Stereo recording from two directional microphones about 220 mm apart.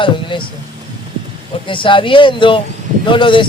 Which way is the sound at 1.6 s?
20° left (ahead or behind).